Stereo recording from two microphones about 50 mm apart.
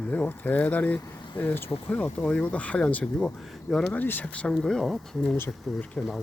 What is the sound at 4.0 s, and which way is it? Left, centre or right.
Speech, left.